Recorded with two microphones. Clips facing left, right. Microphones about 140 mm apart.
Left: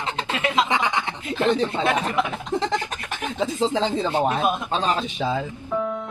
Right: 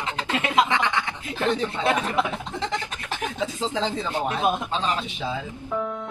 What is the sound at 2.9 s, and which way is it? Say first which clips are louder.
Speech: left 1 dB; 35° left (ahead or behind).